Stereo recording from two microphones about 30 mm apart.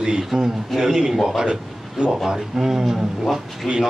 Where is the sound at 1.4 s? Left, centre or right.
Right.